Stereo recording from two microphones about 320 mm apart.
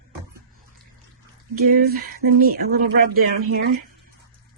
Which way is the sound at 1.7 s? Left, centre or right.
Right.